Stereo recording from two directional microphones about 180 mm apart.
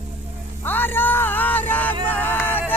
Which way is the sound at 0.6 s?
10° left (ahead or behind).